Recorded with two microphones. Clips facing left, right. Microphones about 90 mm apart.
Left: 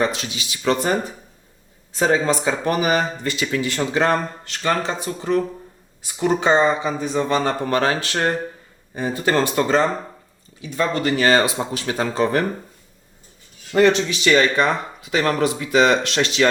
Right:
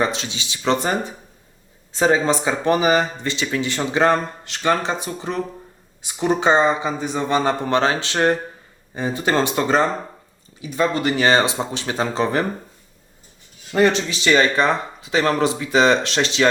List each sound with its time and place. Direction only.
0.0 s speech: 25° right (ahead or behind)
2.0 s speech: 25° right (ahead or behind)
13.7 s speech: 30° right (ahead or behind)